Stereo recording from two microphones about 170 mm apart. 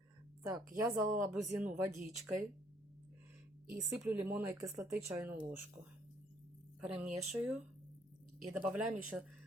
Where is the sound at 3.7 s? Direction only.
15° right (ahead or behind).